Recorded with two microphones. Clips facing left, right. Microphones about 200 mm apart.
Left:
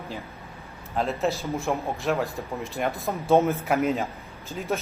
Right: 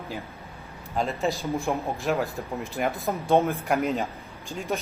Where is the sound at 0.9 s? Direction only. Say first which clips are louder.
Left 1 dB; centre (ahead or behind).